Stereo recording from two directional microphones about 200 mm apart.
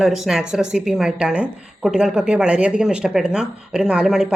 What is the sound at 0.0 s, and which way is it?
Speech, centre (ahead or behind).